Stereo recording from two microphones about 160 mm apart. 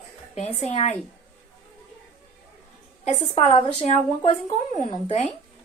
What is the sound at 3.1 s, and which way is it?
A woman's voice, 40° left (ahead or behind).